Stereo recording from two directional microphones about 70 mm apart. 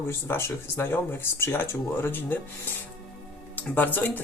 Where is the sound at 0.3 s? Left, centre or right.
Left.